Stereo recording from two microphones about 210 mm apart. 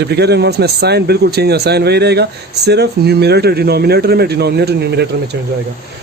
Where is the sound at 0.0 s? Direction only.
50° right (ahead or behind).